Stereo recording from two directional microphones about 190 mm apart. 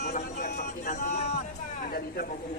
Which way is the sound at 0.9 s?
55° left (ahead or behind).